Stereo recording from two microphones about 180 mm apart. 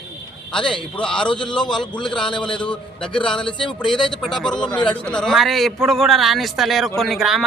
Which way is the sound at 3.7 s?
Centre (ahead or behind).